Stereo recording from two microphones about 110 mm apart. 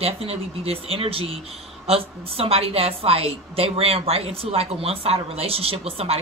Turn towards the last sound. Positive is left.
turn(degrees=-65)  # may be behind; listen again after turning